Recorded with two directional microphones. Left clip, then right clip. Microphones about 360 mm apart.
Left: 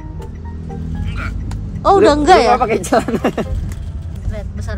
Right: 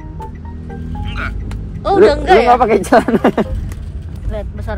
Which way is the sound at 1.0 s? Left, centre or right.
Centre.